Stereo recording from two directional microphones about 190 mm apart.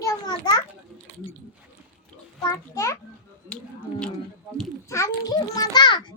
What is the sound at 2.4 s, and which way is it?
Speech, 15° left (ahead or behind).